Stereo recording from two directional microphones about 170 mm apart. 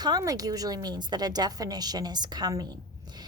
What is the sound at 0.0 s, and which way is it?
A woman's voice, 20° right (ahead or behind).